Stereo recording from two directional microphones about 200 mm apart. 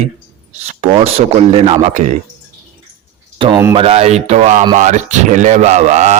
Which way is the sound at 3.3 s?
25° right (ahead or behind).